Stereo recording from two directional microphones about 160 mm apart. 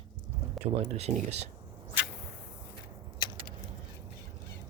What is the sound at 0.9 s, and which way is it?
Speech, 40° right (ahead or behind).